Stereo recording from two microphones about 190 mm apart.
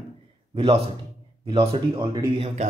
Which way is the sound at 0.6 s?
25° right (ahead or behind).